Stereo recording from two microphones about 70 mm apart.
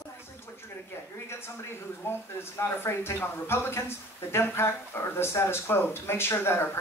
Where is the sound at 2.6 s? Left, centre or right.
Left.